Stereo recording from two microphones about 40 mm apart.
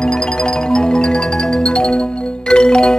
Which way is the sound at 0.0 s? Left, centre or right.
Left.